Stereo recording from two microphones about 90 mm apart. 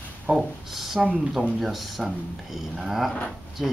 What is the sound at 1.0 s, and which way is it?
Speech, 15° right (ahead or behind).